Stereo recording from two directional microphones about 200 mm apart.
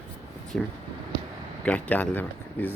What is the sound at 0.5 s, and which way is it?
Speech, 5° left (ahead or behind).